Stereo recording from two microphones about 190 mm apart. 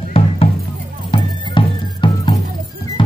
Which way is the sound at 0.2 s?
30° left (ahead or behind).